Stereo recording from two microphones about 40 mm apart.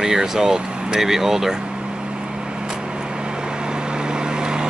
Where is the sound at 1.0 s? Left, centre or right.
Centre.